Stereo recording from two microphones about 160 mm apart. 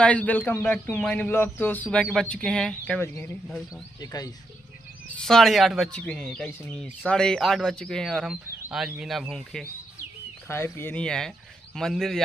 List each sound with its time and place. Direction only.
0.0 s speech: 10° left (ahead or behind)
3.4 s speech: centre (ahead or behind)
4.0 s speech: 25° left (ahead or behind)
5.2 s speech: centre (ahead or behind)
10.5 s speech: 15° left (ahead or behind)